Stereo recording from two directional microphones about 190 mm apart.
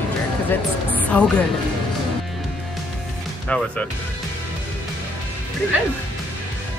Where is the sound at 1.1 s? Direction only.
5° left (ahead or behind).